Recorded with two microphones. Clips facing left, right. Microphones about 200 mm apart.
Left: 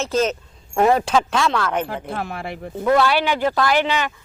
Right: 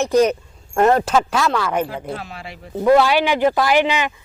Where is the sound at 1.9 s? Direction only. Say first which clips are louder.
Left 1 dB; 55° left (ahead or behind).